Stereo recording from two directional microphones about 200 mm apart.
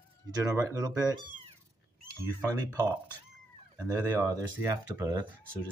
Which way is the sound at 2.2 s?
15° right (ahead or behind).